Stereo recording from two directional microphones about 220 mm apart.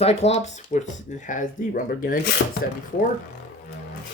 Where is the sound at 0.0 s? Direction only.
30° left (ahead or behind).